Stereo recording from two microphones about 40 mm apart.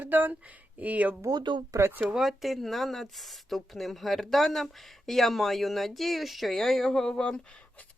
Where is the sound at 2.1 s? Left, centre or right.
Centre.